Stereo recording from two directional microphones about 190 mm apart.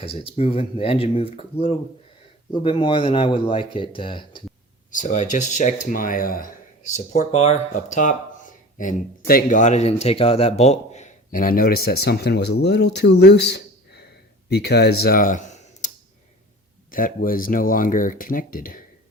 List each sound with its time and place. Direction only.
0.0 s speech: 30° left (ahead or behind)
4.9 s speech: 40° left (ahead or behind)
16.9 s speech: 50° left (ahead or behind)